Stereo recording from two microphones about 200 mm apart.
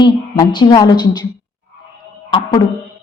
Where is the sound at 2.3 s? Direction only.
25° left (ahead or behind).